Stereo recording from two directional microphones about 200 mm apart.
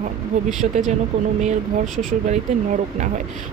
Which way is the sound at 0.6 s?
45° right (ahead or behind).